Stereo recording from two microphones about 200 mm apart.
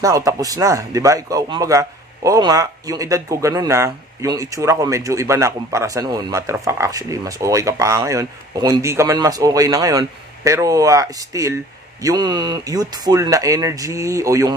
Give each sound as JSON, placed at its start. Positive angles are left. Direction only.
{"t": 0.0, "sound": "speech", "side_deg": -15}